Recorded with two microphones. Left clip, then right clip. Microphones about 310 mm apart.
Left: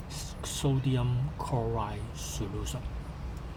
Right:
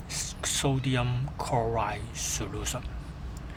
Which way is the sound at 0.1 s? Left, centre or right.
Right.